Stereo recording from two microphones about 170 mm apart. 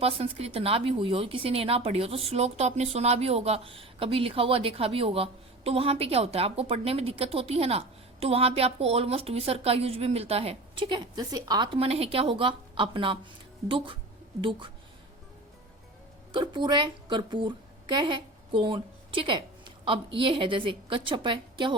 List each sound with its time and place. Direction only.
0.0 s a woman's voice: 35° right (ahead or behind)
16.3 s a woman's voice: 25° right (ahead or behind)